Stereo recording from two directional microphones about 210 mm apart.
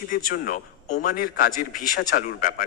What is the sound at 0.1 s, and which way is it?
A man's voice, 45° left (ahead or behind).